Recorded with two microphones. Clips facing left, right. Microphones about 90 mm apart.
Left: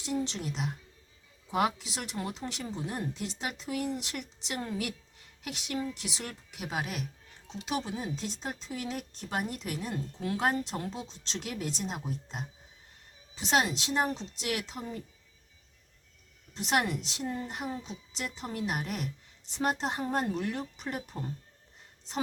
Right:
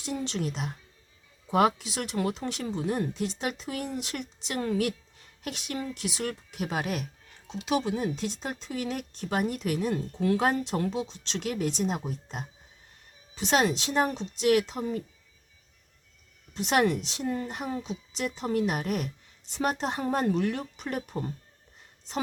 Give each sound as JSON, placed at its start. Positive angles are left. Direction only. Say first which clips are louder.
{"t": 0.0, "sound": "a woman's voice", "louder": "right 2 dB", "side_deg": -60}
{"t": 4.6, "sound": "a woman's voice", "louder": "right 8 dB", "side_deg": -75}
{"t": 5.4, "sound": "speech", "louder": "right 1 dB", "side_deg": -50}
{"t": 7.6, "sound": "speech", "louder": "right 6 dB", "side_deg": -65}
{"t": 16.6, "sound": "speech", "louder": "right 5 dB", "side_deg": -60}